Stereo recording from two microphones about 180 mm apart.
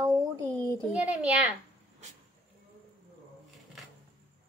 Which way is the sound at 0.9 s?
5° right (ahead or behind).